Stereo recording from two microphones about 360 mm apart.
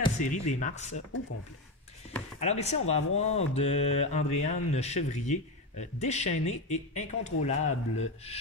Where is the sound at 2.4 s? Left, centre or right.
Centre.